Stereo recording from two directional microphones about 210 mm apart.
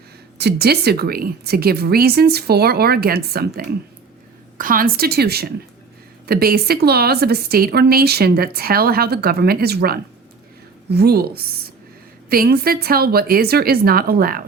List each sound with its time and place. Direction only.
0.3 s a woman's voice: 50° right (ahead or behind)